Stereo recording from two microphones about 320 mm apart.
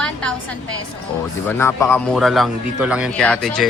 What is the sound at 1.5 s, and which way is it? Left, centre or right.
A man's voice, centre.